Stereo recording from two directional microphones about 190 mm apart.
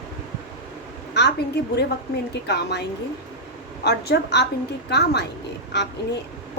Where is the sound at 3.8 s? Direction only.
60° left (ahead or behind).